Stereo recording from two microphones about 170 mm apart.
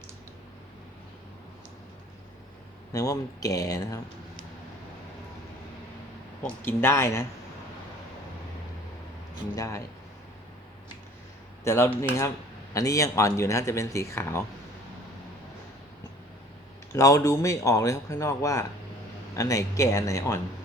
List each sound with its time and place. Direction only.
2.9 s speech: 20° left (ahead or behind)
6.4 s speech: 15° left (ahead or behind)
9.6 s speech: 20° left (ahead or behind)
11.6 s speech: 15° left (ahead or behind)
16.9 s speech: 20° left (ahead or behind)